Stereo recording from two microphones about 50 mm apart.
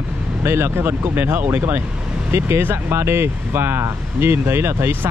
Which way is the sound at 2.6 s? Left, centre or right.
Right.